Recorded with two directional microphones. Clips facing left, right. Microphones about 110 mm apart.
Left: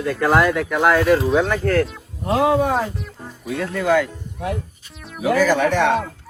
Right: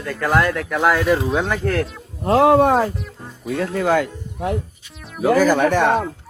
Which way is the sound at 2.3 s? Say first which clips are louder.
Right 4 dB; 60° right (ahead or behind).